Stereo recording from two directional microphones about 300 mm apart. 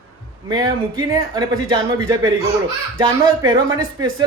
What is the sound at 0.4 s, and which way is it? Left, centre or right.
Speech, centre.